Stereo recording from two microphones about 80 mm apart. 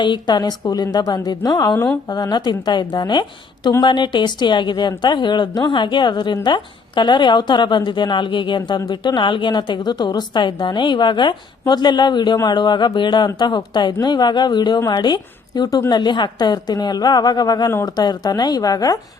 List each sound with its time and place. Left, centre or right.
0.0 s a woman's voice: left
11.6 s a woman's voice: left